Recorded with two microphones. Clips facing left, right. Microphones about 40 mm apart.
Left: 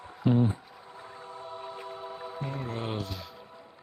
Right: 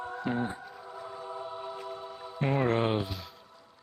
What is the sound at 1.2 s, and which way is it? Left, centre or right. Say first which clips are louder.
Music: right 1 dB; centre.